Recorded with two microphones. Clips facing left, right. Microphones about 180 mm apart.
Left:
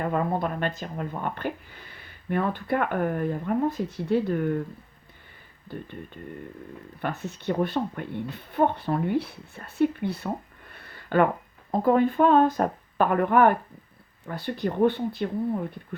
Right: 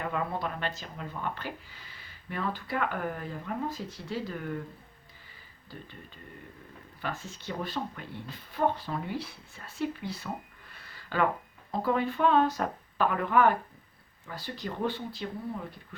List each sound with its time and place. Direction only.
0.0 s speech: 45° left (ahead or behind)
7.0 s speech: 65° left (ahead or behind)
10.7 s a sound: 55° left (ahead or behind)
11.7 s speech: 50° left (ahead or behind)